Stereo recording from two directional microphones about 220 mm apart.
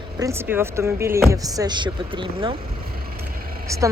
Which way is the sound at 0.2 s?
10° right (ahead or behind).